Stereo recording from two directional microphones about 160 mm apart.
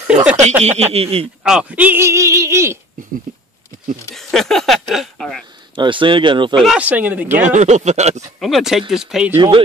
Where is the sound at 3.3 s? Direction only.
55° right (ahead or behind).